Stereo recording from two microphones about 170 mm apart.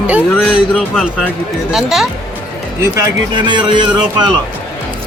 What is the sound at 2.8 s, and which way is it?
A man's voice, 20° right (ahead or behind).